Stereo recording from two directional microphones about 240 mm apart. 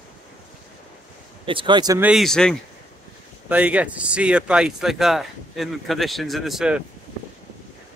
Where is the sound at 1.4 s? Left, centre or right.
Right.